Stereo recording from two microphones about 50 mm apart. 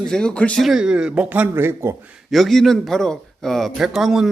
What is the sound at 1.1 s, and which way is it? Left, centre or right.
Speech, right.